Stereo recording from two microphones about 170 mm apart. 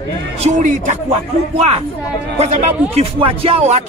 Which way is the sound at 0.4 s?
45° right (ahead or behind).